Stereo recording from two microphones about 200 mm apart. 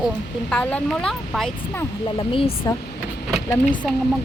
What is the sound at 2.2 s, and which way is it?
Speech, 25° left (ahead or behind).